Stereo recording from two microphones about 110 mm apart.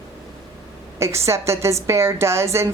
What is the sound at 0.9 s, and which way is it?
Speech, 25° right (ahead or behind).